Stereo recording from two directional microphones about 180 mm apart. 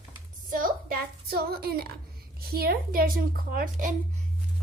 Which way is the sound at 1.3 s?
60° right (ahead or behind).